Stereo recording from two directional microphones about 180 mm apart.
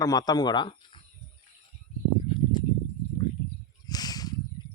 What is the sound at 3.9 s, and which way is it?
Snake, 20° left (ahead or behind).